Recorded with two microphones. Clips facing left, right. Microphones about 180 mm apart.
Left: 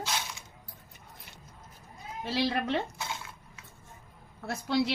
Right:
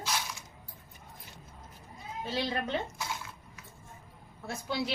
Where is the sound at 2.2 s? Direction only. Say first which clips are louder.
Left 4 dB; 75° left (ahead or behind).